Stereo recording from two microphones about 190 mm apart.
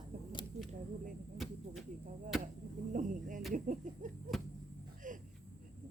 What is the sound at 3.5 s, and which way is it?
Speech, 45° right (ahead or behind).